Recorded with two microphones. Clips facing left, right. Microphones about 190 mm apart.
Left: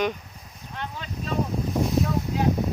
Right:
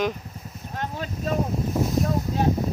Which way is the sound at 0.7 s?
45° right (ahead or behind).